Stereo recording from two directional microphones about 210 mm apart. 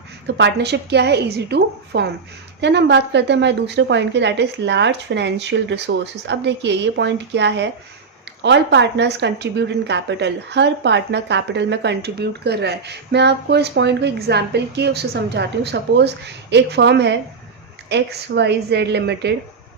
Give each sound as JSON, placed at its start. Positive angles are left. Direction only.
{"t": 0.3, "sound": "a woman's voice", "side_deg": -55}